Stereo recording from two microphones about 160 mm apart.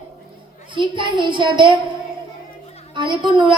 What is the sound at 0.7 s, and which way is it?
Speech, 30° right (ahead or behind).